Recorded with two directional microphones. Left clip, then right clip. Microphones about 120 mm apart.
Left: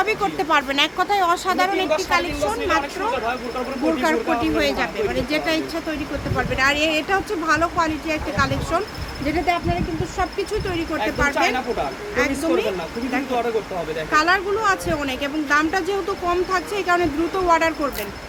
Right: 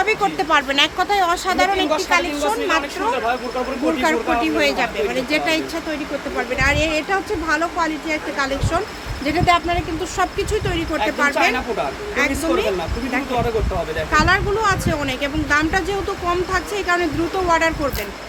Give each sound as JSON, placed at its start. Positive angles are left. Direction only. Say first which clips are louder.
{"t": 0.0, "sound": "speech", "louder": "right 3 dB", "side_deg": 5}
{"t": 9.2, "sound": "speech", "louder": "right 5 dB", "side_deg": -15}
{"t": 9.6, "sound": "speech", "louder": "right 3 dB", "side_deg": -35}
{"t": 11.2, "sound": "speech", "louder": "right 2 dB", "side_deg": -5}
{"t": 14.1, "sound": "speech", "louder": "right 1 dB", "side_deg": 10}